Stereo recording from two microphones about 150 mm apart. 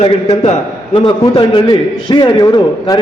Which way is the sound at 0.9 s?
35° left (ahead or behind).